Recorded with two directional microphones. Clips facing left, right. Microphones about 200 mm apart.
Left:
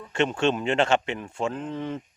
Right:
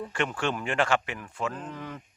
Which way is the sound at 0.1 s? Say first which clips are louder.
Left 8 dB; 25° left (ahead or behind).